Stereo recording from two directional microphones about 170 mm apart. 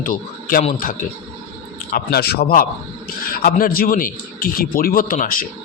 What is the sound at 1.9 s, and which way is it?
Speech, 65° left (ahead or behind).